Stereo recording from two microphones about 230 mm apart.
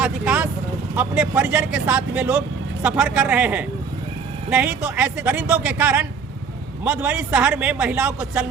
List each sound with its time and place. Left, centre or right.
0.0 s a man's voice: centre